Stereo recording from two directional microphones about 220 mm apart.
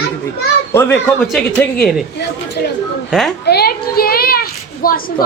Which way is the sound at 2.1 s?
50° left (ahead or behind).